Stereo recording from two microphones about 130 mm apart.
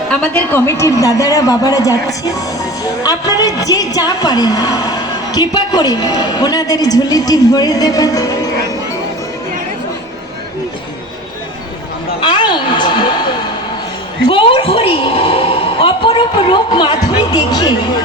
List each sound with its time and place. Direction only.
0.1 s a woman's voice: 10° left (ahead or behind); by 8.4 s 30° left (ahead or behind)
12.2 s a sound: 35° left (ahead or behind)
17.3 s speech: 30° left (ahead or behind)